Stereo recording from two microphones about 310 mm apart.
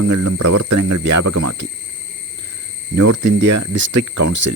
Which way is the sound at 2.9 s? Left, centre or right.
Right.